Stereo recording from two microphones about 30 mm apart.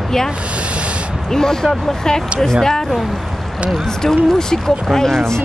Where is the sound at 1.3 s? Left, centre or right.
Centre.